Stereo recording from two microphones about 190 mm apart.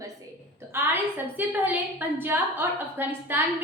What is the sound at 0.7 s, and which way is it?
A woman's voice, 10° right (ahead or behind).